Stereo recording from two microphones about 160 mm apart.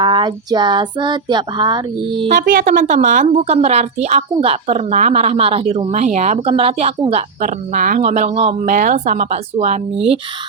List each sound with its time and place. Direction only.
0.0 s child singing: 30° right (ahead or behind)
2.3 s a woman's voice: 60° right (ahead or behind)
8.0 s a woman's voice: 45° right (ahead or behind)